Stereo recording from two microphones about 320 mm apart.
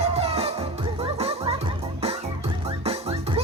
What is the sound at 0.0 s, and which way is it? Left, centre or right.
Music, centre.